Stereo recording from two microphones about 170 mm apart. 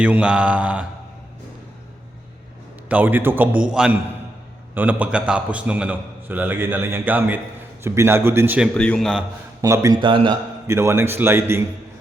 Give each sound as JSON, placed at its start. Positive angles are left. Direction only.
{"t": 0.0, "sound": "a man's voice", "side_deg": -5}
{"t": 2.9, "sound": "a man's voice", "side_deg": -10}
{"t": 8.7, "sound": "a man's voice", "side_deg": 5}
{"t": 9.6, "sound": "a man's voice", "side_deg": -20}
{"t": 10.8, "sound": "a man's voice", "side_deg": -15}